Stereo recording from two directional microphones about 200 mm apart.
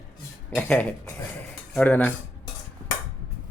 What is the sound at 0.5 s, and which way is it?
Speech, 5° left (ahead or behind).